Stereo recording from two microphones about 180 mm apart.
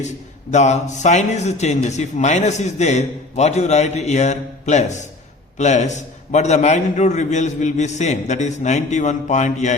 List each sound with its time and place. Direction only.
0.5 s a man's voice: 40° left (ahead or behind)